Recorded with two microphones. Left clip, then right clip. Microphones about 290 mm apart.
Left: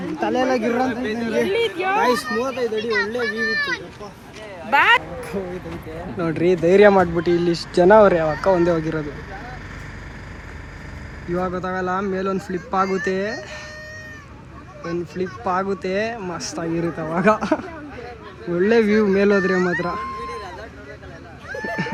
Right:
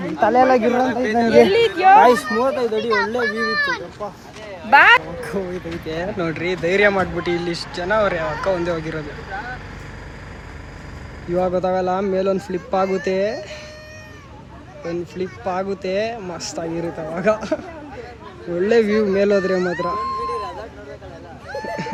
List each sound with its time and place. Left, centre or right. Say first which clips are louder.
0.2 s speech: right 6 dB; right
2.4 s a child's voice: right 4 dB; right
6.1 s speech: left 3 dB; centre
11.3 s speech: right 6 dB; centre
14.8 s speech: even; centre
21.5 s a sound: even; centre